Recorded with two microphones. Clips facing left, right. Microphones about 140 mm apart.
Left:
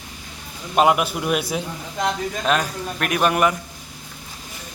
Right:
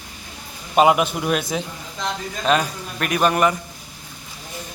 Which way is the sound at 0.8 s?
Centre (ahead or behind).